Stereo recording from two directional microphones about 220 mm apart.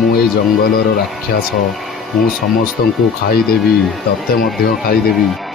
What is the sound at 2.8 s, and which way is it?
Speech, 45° left (ahead or behind).